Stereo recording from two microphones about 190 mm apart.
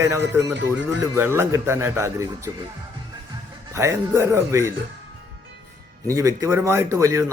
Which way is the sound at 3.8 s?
15° right (ahead or behind).